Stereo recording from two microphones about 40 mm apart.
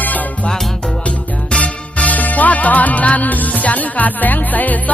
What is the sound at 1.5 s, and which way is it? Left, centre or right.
Music, left.